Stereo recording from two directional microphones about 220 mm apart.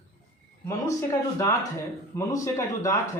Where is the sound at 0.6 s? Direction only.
15° left (ahead or behind).